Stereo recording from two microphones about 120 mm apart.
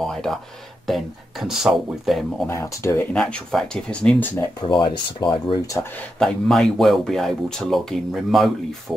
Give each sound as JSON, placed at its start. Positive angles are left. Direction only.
{"t": 0.0, "sound": "speech", "side_deg": 5}
{"t": 2.4, "sound": "speech", "side_deg": 20}
{"t": 3.2, "sound": "speech", "side_deg": 5}
{"t": 4.4, "sound": "speech", "side_deg": 35}
{"t": 5.9, "sound": "speech", "side_deg": 5}